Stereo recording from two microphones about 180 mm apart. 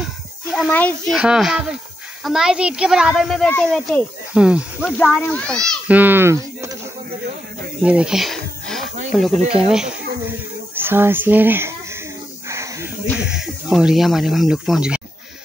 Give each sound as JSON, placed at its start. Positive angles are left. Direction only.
{"t": 0.5, "sound": "a child's voice", "side_deg": 0}
{"t": 1.1, "sound": "a woman's voice", "side_deg": -5}
{"t": 4.9, "sound": "a child's voice", "side_deg": 10}
{"t": 5.9, "sound": "speech", "side_deg": -10}
{"t": 7.8, "sound": "snake", "side_deg": -5}
{"t": 9.1, "sound": "a woman's voice", "side_deg": 0}
{"t": 12.4, "sound": "a sound", "side_deg": -15}
{"t": 13.4, "sound": "a woman's voice", "side_deg": -5}